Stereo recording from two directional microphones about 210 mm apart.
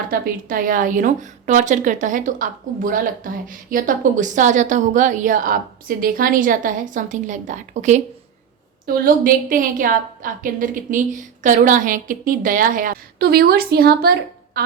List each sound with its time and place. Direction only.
0.1 s a woman's voice: 45° right (ahead or behind)